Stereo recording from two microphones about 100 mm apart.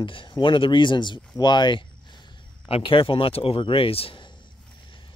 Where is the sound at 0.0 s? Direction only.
60° left (ahead or behind).